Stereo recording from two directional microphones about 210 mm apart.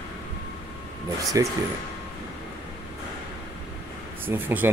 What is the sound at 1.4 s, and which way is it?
Speech, 15° right (ahead or behind).